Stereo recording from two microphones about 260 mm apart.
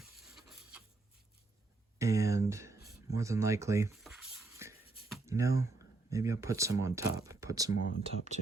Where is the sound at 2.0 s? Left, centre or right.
Centre.